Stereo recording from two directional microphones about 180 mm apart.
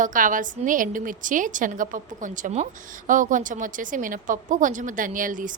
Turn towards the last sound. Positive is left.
turn(degrees=-45)  # may be behind; listen again after turning